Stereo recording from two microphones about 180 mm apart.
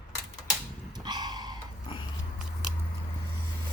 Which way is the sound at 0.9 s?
25° right (ahead or behind).